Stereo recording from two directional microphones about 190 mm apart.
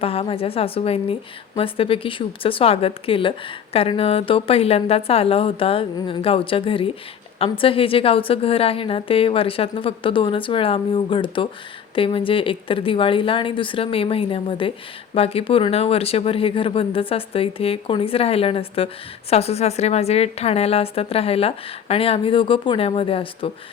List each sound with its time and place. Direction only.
0.0 s a woman's voice: 30° left (ahead or behind)